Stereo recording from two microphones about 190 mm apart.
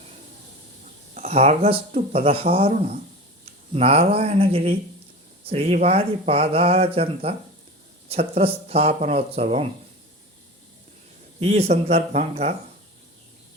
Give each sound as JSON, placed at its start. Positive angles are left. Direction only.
{"t": 1.1, "sound": "speech", "side_deg": -35}
{"t": 11.3, "sound": "speech", "side_deg": -35}